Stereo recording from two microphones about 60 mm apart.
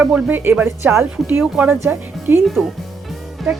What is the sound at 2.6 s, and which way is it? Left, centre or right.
Speech, centre.